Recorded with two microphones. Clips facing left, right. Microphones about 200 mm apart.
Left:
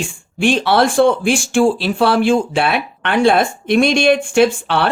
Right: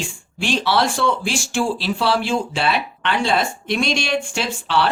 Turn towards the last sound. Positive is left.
turn(degrees=55)  # may be behind; listen again after turning